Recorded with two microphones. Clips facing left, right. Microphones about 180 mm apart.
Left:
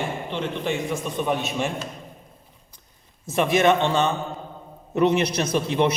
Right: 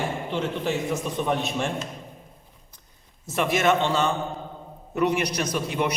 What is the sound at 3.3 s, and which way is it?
A man's voice, 20° left (ahead or behind).